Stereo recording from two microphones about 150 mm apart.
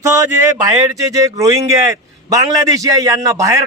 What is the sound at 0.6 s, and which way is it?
A man's voice, 20° right (ahead or behind).